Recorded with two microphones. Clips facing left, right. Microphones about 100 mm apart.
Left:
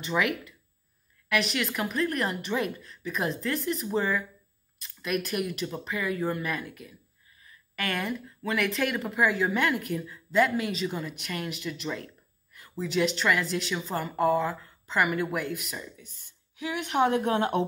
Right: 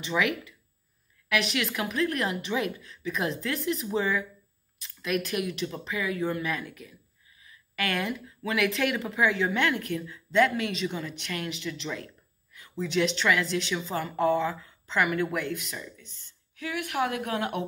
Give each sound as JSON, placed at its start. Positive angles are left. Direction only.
{"t": 0.0, "sound": "speech", "side_deg": 0}
{"t": 16.2, "sound": "speech", "side_deg": 15}